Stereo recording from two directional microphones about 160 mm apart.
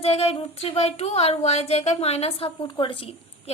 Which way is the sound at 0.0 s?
40° left (ahead or behind).